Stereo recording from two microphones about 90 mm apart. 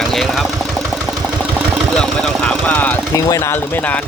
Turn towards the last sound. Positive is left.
turn(degrees=40)  # may be behind; listen again after turning